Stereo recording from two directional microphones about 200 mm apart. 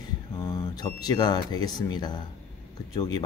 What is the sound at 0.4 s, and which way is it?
Speech, 20° left (ahead or behind).